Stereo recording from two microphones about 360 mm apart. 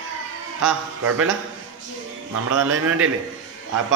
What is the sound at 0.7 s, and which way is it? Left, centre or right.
Speech, right.